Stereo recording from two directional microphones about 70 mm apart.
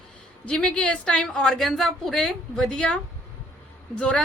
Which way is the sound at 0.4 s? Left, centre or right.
Centre.